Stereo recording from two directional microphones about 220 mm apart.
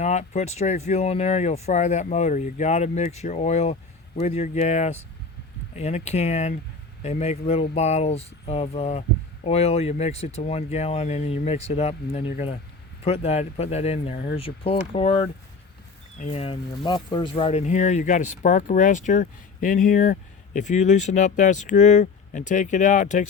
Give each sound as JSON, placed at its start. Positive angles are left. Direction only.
{"t": 0.0, "sound": "speech", "side_deg": 30}